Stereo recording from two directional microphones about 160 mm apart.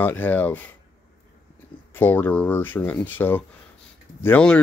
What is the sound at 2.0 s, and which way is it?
Speech, 10° left (ahead or behind).